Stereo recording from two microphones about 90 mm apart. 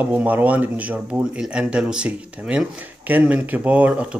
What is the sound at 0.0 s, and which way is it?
Speech, 15° right (ahead or behind).